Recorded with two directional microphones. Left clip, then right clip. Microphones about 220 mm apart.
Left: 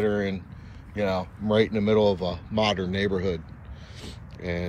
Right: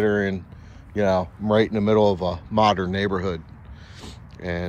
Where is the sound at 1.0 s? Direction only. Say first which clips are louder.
Right 6 dB; 40° right (ahead or behind).